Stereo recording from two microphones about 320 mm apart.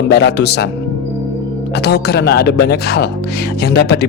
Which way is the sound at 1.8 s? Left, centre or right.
Left.